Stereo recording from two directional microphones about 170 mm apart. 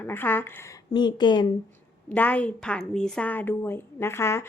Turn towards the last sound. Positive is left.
turn(degrees=15)  # may be behind; listen again after turning